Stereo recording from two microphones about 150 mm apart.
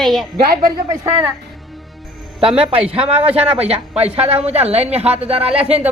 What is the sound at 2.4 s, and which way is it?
Speech, 35° right (ahead or behind).